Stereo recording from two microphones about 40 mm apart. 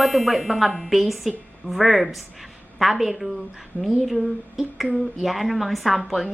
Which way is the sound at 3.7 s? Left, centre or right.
Left.